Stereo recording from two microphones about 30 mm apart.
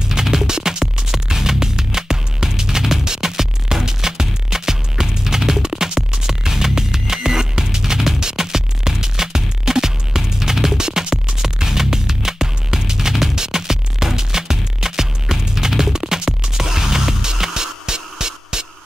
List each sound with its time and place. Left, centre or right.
0.1 s music: centre
11.4 s music: centre